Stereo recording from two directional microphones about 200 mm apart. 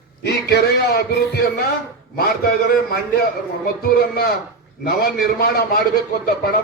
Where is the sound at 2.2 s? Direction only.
50° left (ahead or behind).